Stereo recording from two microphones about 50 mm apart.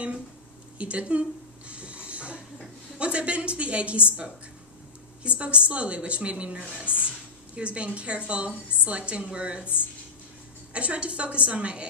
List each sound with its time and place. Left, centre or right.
0.7 s a woman's voice: right
1.7 s snoring: right
3.0 s a woman's voice: right
5.2 s a woman's voice: right
10.7 s a woman's voice: right